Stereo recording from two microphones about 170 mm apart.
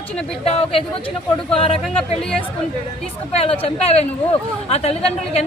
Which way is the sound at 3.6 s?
40° left (ahead or behind).